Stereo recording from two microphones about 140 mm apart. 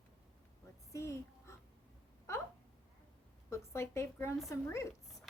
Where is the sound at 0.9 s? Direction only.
20° left (ahead or behind).